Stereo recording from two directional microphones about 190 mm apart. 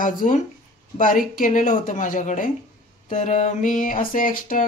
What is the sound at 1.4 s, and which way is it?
Speech, 45° left (ahead or behind).